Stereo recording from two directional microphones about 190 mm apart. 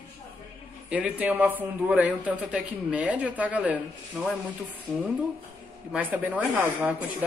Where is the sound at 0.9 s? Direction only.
10° right (ahead or behind).